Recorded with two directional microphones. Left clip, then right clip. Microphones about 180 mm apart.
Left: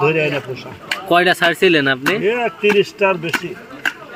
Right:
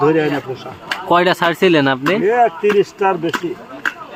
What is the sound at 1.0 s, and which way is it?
Speech, 20° right (ahead or behind).